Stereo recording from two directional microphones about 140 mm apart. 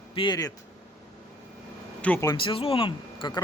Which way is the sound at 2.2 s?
35° left (ahead or behind).